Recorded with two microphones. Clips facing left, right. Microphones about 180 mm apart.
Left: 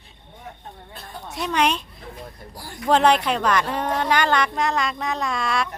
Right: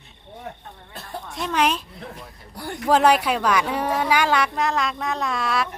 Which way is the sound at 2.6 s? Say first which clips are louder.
Right 8 dB; 65° right (ahead or behind).